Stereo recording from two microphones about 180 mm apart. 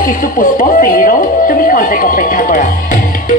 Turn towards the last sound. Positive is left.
turn(degrees=50)  # may be behind; listen again after turning